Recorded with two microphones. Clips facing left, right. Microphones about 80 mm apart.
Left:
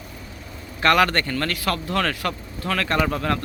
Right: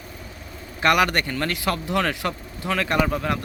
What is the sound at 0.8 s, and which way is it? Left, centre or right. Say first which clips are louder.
Speech: left 1 dB; centre.